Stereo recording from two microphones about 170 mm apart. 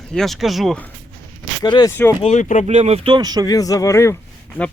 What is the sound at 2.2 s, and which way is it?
Speech, 45° left (ahead or behind).